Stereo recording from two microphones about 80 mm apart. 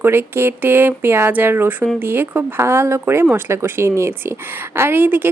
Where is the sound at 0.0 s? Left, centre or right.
Right.